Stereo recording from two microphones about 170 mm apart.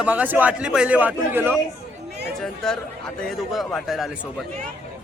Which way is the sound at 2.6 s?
5° left (ahead or behind).